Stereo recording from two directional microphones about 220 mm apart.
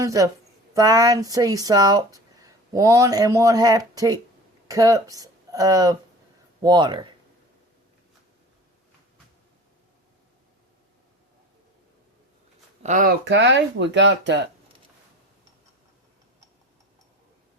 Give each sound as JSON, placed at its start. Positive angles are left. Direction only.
{"t": 0.0, "sound": "speech", "side_deg": -15}
{"t": 12.8, "sound": "speech", "side_deg": -35}
{"t": 13.2, "sound": "speech", "side_deg": -55}